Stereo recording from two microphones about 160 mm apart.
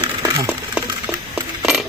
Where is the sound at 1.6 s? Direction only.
5° right (ahead or behind).